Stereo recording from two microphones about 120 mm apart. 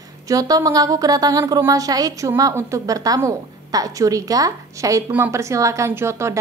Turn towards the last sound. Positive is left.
turn(degrees=-25)  # may be behind; listen again after turning